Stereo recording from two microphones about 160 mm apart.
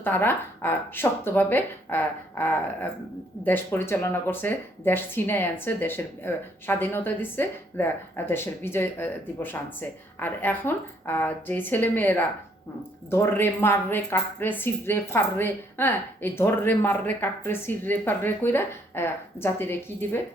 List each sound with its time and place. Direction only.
0.0 s speech: 15° left (ahead or behind)